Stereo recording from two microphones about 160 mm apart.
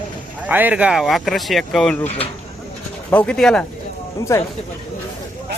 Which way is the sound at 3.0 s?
10° left (ahead or behind).